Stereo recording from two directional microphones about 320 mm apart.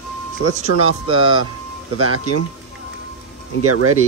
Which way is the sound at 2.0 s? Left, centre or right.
Right.